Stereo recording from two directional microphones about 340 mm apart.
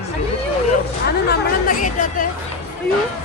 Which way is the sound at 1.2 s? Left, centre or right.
Left.